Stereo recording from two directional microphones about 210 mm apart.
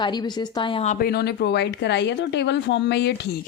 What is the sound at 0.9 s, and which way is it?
Speech, 45° left (ahead or behind).